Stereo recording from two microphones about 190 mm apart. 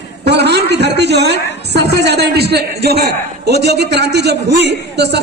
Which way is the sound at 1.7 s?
60° right (ahead or behind).